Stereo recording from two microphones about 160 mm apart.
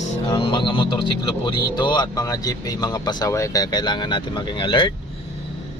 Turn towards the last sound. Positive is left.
turn(degrees=30)  # may be behind; listen again after turning